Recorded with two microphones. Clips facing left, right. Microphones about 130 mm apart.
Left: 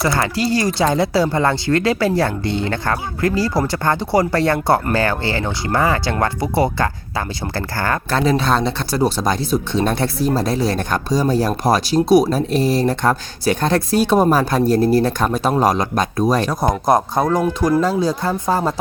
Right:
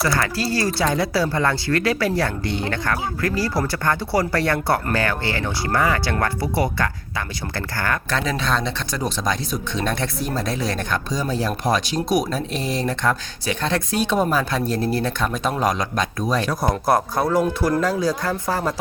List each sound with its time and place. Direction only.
0.0 s speech: 25° left (ahead or behind); by 16.5 s 40° left (ahead or behind)
16.5 s speech: 20° left (ahead or behind)